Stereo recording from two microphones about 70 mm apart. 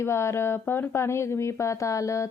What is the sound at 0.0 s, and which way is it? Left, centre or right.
Speech, left.